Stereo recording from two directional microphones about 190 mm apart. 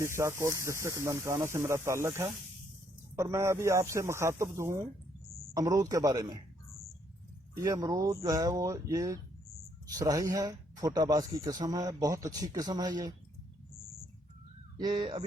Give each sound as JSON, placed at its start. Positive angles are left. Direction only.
{"t": 0.0, "sound": "speech", "side_deg": -15}
{"t": 7.5, "sound": "speech", "side_deg": -20}
{"t": 14.8, "sound": "speech", "side_deg": -20}